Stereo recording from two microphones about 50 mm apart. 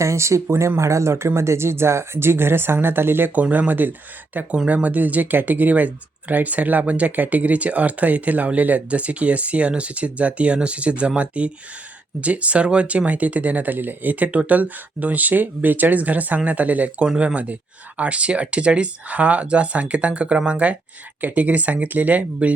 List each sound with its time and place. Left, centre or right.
0.0 s speech: right
3.4 s speech: right